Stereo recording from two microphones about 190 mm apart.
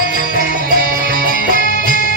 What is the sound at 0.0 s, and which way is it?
Music, 45° left (ahead or behind).